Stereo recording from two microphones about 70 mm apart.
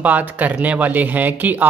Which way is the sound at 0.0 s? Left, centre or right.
Right.